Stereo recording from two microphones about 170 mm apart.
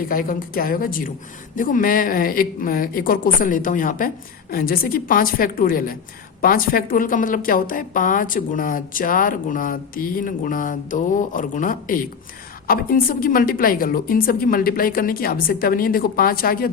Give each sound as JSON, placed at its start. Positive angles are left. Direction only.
{"t": 0.1, "sound": "a woman's voice", "side_deg": 55}